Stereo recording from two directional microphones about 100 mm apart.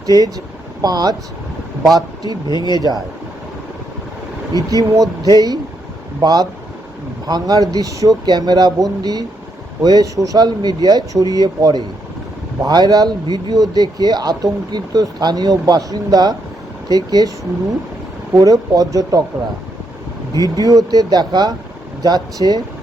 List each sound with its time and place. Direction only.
0.8 s speech: 40° right (ahead or behind)
2.5 s speech: 45° left (ahead or behind)
2.7 s speech: 40° right (ahead or behind)
4.7 s speech: 35° right (ahead or behind)
20.6 s speech: 35° right (ahead or behind)